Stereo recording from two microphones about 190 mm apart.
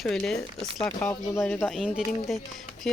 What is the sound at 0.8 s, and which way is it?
Speech, 25° left (ahead or behind).